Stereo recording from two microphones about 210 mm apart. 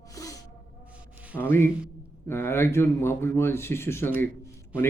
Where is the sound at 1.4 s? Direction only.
10° left (ahead or behind).